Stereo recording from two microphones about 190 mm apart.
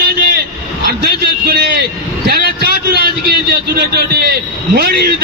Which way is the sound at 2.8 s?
55° right (ahead or behind).